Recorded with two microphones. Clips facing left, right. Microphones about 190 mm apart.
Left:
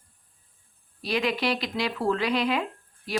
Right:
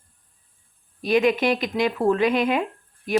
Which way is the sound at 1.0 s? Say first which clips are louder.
Right 7 dB; 20° right (ahead or behind).